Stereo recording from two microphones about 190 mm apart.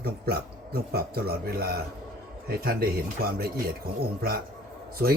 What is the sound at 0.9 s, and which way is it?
A man's voice, 55° right (ahead or behind).